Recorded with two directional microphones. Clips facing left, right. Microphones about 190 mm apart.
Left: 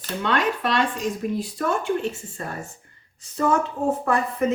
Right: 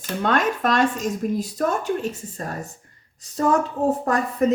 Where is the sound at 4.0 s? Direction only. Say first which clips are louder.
Right 2 dB; 40° right (ahead or behind).